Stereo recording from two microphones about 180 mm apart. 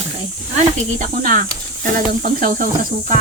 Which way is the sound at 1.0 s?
50° right (ahead or behind).